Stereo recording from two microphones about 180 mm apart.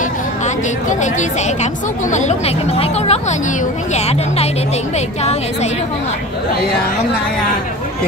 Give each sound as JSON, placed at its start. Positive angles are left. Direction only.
{"t": 1.6, "sound": "a woman's voice", "side_deg": 40}